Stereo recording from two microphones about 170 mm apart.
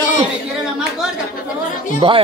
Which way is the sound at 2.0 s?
30° right (ahead or behind).